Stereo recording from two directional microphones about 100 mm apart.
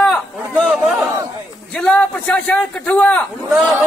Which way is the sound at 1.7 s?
10° left (ahead or behind).